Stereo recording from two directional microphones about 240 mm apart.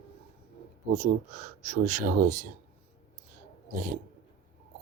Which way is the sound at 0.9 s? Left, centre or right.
Right.